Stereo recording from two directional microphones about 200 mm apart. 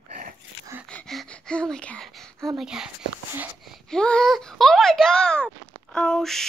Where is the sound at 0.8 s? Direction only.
5° left (ahead or behind).